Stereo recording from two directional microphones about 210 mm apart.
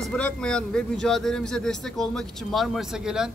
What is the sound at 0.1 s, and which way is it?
A man's voice, 5° left (ahead or behind).